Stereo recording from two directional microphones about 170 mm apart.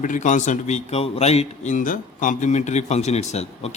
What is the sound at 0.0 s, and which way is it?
A man's voice, 45° left (ahead or behind).